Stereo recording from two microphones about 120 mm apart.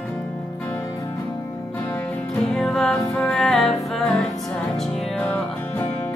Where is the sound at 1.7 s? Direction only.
15° left (ahead or behind).